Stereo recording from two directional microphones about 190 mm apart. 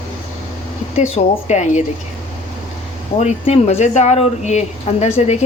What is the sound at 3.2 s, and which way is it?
A woman's voice, 35° left (ahead or behind).